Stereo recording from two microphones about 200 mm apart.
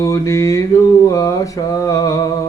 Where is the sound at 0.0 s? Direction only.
15° left (ahead or behind).